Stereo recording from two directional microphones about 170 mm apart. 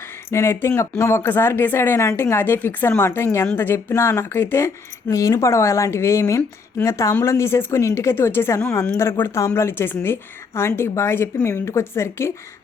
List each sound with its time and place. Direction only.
0.3 s speech: 15° left (ahead or behind)